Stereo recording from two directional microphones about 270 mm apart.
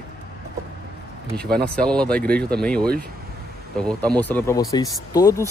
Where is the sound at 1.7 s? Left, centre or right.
Centre.